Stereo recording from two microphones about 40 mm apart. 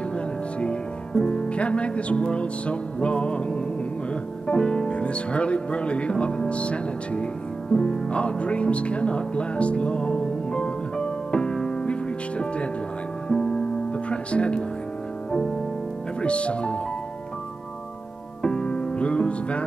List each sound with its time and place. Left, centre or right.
1.1 s music: centre
1.5 s speech: left
7.7 s music: left
13.3 s music: centre
13.9 s music: left
16.2 s speech: left
18.4 s music: left